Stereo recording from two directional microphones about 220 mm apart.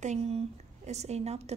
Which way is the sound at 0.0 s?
30° right (ahead or behind).